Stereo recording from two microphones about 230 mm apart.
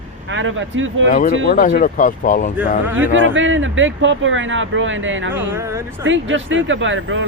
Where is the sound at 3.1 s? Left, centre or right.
Right.